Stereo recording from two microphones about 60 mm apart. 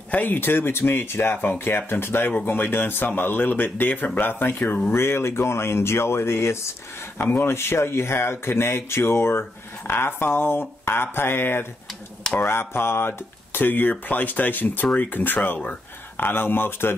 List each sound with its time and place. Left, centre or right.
0.1 s speech: left